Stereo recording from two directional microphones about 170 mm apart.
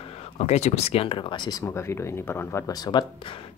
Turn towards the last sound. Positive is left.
turn(degrees=20)  # may be behind; listen again after turning